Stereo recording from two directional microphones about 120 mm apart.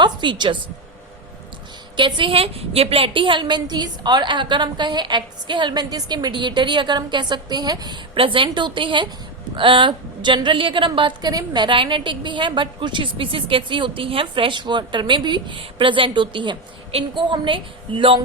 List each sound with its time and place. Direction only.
0.0 s a woman's voice: 40° right (ahead or behind)
2.0 s a woman's voice: 40° right (ahead or behind)
8.1 s a woman's voice: 45° right (ahead or behind)